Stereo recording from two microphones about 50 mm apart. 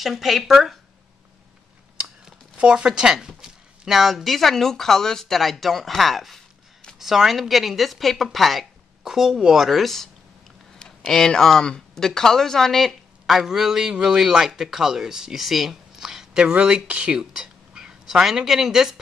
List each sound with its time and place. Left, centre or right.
0.0 s speech: centre
2.5 s speech: right; by 10.0 s centre
11.1 s speech: centre
13.4 s speech: centre